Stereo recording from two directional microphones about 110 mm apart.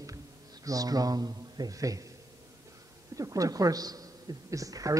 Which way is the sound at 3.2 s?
30° right (ahead or behind).